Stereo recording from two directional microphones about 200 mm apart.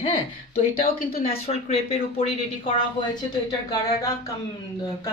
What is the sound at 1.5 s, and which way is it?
Speech, 30° left (ahead or behind).